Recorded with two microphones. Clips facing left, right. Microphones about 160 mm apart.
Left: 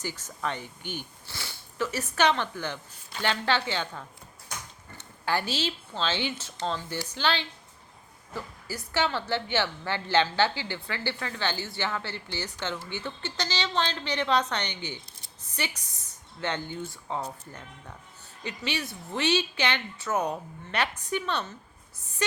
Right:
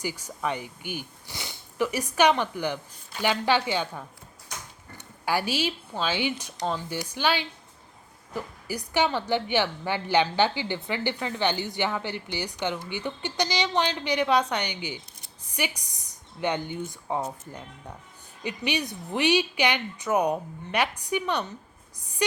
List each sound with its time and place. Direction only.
0.0 s a woman's voice: 10° right (ahead or behind)